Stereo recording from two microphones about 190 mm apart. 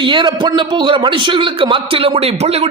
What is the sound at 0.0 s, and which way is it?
A man's voice, 25° right (ahead or behind).